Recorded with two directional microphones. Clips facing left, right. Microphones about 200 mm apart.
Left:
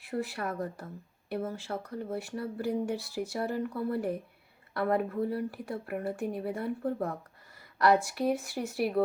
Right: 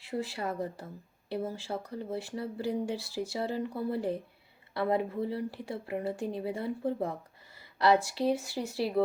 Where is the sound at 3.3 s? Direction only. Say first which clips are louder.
Left 1 dB; 25° right (ahead or behind).